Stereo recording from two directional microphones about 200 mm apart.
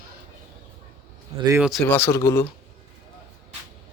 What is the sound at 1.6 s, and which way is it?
Speech, centre (ahead or behind).